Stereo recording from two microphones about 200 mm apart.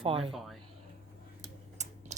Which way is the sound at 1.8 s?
35° right (ahead or behind).